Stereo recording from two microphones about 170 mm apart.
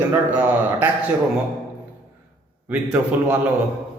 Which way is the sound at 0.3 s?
10° right (ahead or behind).